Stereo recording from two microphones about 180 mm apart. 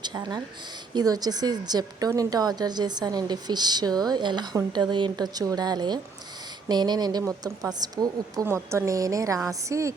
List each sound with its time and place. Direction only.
0.0 s a woman's voice: 25° right (ahead or behind)